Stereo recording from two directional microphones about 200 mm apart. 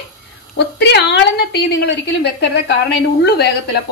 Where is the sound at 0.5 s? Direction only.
60° left (ahead or behind).